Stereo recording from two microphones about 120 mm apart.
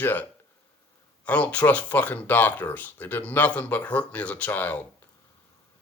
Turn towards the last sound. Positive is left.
turn(degrees=15)  # may be behind; listen again after turning